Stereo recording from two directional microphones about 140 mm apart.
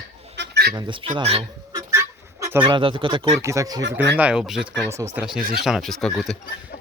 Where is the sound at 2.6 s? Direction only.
35° right (ahead or behind).